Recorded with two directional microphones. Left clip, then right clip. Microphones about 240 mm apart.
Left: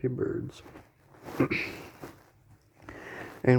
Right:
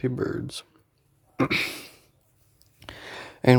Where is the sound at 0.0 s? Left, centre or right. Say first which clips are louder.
Right 3 dB; right.